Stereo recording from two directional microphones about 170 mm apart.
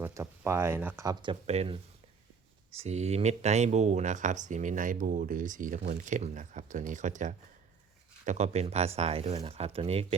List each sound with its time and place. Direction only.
0.0 s speech: 15° right (ahead or behind)
1.2 s speech: 35° right (ahead or behind)